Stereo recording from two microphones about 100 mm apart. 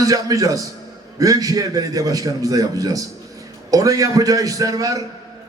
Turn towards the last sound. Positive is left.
turn(degrees=-35)  # may be behind; listen again after turning